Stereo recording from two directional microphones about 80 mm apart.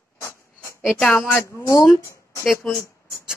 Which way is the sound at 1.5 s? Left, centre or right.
Left.